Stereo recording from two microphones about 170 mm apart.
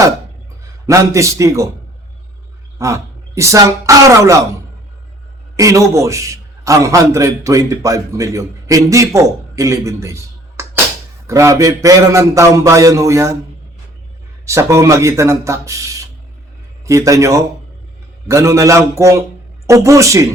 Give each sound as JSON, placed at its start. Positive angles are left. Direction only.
{"t": 0.9, "sound": "a man's voice", "side_deg": -20}
{"t": 2.7, "sound": "speech", "side_deg": -20}
{"t": 5.5, "sound": "a man's voice", "side_deg": -20}
{"t": 14.4, "sound": "a man's voice", "side_deg": -15}